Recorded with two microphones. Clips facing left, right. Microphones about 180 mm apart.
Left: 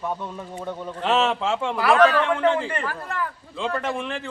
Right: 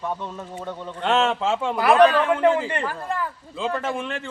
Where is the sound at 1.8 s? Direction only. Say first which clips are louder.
Right 2 dB; 15° right (ahead or behind).